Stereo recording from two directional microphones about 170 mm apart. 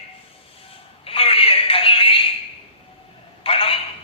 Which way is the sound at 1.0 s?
35° left (ahead or behind).